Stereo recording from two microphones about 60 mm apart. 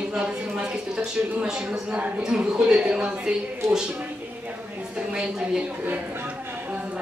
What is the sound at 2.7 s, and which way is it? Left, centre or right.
Speech, centre.